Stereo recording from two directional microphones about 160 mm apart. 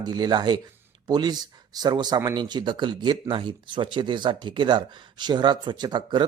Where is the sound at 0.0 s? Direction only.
25° right (ahead or behind).